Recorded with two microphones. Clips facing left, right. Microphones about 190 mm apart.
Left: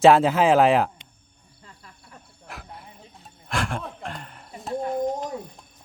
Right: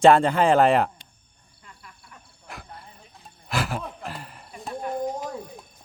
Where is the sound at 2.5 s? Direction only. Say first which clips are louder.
Even; centre (ahead or behind).